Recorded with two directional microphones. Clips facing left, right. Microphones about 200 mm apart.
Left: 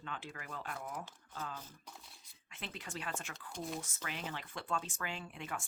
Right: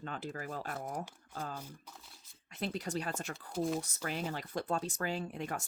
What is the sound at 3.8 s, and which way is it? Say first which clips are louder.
Speech: right 6 dB; 40° right (ahead or behind).